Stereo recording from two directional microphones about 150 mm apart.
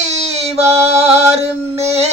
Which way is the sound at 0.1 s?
45° right (ahead or behind).